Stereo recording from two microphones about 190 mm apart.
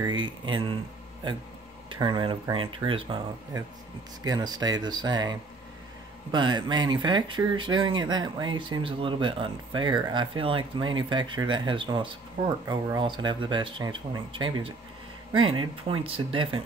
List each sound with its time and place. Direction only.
0.0 s speech: 25° right (ahead or behind)
1.9 s speech: 25° right (ahead or behind)
4.2 s speech: 20° right (ahead or behind)